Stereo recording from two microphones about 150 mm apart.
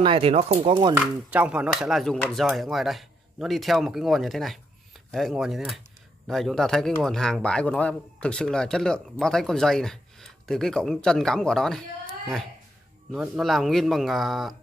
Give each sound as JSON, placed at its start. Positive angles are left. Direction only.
{"t": 0.0, "sound": "speech", "side_deg": -40}
{"t": 0.9, "sound": "speech", "side_deg": -10}
{"t": 13.1, "sound": "speech", "side_deg": 0}